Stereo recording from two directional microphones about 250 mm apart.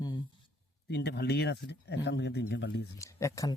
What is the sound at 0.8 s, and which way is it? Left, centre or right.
Speech, left.